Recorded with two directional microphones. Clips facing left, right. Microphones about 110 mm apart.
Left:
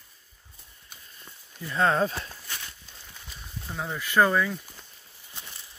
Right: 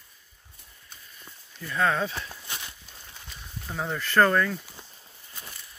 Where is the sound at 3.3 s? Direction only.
Centre (ahead or behind).